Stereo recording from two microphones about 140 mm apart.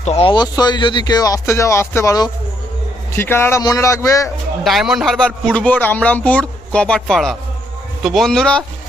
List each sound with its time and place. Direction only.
0.0 s speech: 50° left (ahead or behind)
0.3 s speech: 30° left (ahead or behind)
4.6 s a man's voice: centre (ahead or behind)